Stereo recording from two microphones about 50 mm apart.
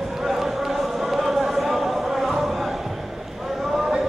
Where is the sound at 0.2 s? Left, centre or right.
Centre.